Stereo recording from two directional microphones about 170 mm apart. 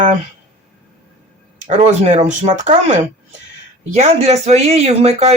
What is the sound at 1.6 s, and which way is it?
Speech, 45° right (ahead or behind).